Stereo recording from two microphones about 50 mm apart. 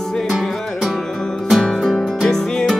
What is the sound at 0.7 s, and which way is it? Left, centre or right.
Music, centre.